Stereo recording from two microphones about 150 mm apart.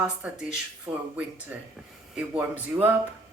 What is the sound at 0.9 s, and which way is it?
Speech, 35° right (ahead or behind).